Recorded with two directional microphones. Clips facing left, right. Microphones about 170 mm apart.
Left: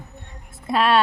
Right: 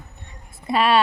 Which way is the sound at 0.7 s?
Centre (ahead or behind).